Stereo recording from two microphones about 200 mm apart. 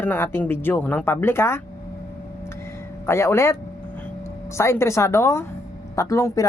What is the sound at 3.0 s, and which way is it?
Speech, 15° left (ahead or behind).